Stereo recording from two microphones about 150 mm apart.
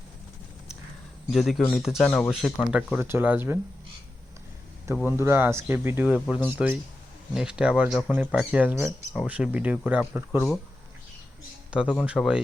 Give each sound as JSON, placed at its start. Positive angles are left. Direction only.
{"t": 1.3, "sound": "speech", "side_deg": 0}
{"t": 5.0, "sound": "speech", "side_deg": -15}
{"t": 6.1, "sound": "speech", "side_deg": 5}
{"t": 6.3, "sound": "speech", "side_deg": -10}
{"t": 11.7, "sound": "speech", "side_deg": -5}